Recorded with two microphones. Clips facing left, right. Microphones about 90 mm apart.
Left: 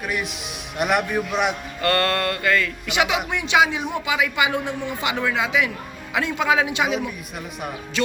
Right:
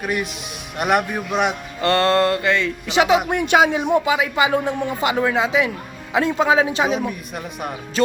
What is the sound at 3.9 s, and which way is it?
Speech, 35° right (ahead or behind).